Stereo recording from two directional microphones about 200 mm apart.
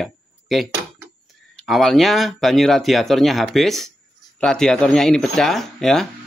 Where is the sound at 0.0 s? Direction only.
Centre (ahead or behind).